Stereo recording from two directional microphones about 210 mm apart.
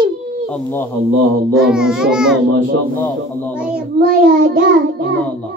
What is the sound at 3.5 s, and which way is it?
Speech, 5° right (ahead or behind).